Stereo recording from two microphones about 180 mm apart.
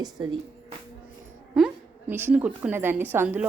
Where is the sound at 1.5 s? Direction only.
10° right (ahead or behind).